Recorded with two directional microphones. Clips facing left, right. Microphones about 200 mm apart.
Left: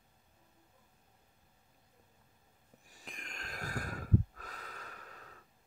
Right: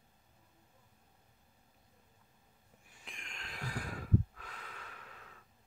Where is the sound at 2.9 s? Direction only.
40° left (ahead or behind).